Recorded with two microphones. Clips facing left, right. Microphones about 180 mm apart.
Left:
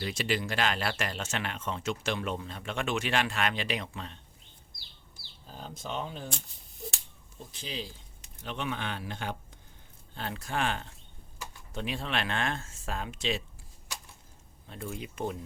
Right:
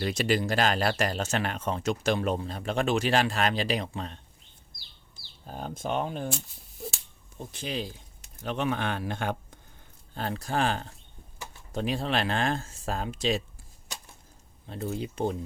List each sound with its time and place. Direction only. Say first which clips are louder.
0.0 s speech: right 5 dB; 40° right (ahead or behind)
5.5 s speech: right 7 dB; 55° right (ahead or behind)
7.3 s speech: right 6 dB; 55° right (ahead or behind)
10.2 s speech: right 4 dB; 40° right (ahead or behind)
14.7 s speech: right 6 dB; 35° right (ahead or behind)